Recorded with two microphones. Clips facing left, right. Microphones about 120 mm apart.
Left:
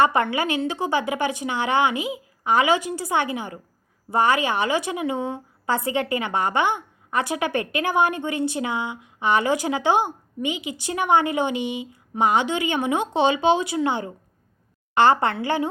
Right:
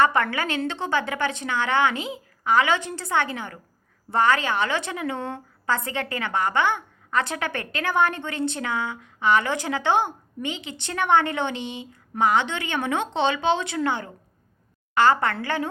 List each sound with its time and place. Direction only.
0.0 s a woman's voice: 15° left (ahead or behind)